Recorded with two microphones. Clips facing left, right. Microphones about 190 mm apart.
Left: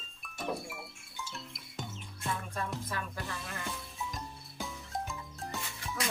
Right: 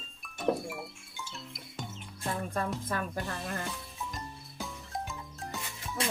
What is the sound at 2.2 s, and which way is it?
Music, 40° right (ahead or behind).